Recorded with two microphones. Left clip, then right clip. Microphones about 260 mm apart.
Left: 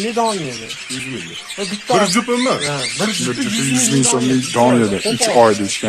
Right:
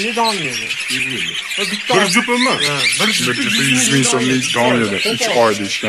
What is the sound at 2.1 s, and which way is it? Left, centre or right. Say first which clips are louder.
Speech: right 2 dB; left.